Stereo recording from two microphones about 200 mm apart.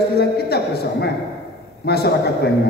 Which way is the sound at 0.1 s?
55° left (ahead or behind).